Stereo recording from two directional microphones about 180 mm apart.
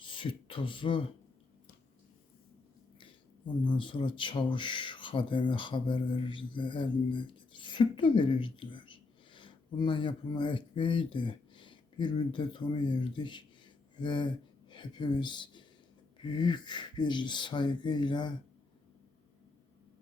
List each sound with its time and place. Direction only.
0.0 s speech: 25° left (ahead or behind)
3.0 s speech: 25° left (ahead or behind)